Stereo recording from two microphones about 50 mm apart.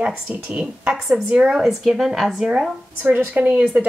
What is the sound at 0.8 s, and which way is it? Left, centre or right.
A woman's voice, centre.